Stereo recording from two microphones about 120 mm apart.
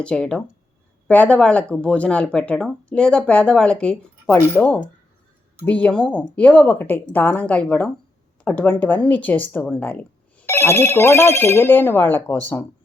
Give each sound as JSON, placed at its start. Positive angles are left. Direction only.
{"t": 0.0, "sound": "speech", "side_deg": 10}